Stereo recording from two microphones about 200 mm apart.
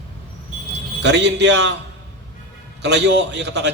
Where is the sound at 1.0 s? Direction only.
60° right (ahead or behind).